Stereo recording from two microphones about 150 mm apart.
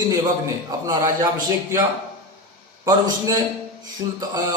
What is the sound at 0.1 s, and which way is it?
A man's voice, 25° right (ahead or behind).